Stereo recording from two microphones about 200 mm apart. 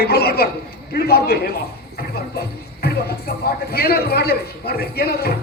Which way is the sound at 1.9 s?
50° left (ahead or behind).